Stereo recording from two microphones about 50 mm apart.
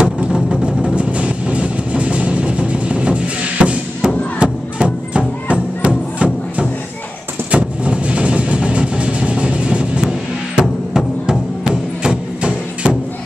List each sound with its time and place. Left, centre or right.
0.0 s music: centre
7.5 s vehicle: right
10.5 s music: centre